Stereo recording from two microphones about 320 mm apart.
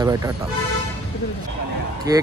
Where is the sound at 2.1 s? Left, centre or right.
Centre.